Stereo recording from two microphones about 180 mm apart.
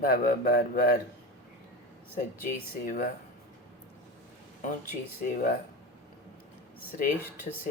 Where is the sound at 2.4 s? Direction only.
50° left (ahead or behind).